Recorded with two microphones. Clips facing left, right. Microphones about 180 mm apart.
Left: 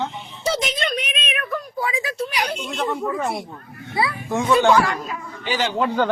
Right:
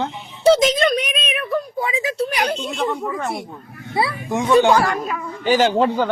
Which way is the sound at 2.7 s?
Centre (ahead or behind).